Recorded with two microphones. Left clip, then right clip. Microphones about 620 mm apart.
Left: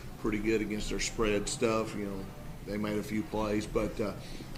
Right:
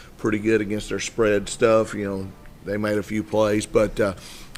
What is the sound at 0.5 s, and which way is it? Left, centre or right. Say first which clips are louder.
Speech: right 10 dB; right.